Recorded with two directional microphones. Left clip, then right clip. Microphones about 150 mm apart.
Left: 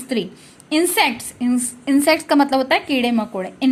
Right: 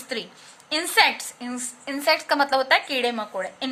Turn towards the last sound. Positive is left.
turn(degrees=15)  # may be behind; listen again after turning